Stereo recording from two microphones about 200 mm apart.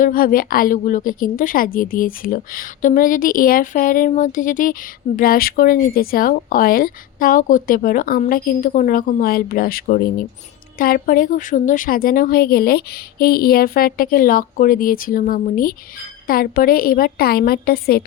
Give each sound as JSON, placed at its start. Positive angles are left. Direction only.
{"t": 0.0, "sound": "a woman's voice", "side_deg": 45}